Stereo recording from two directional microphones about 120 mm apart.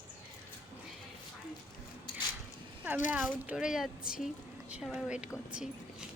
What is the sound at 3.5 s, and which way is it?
A woman's voice, 5° right (ahead or behind).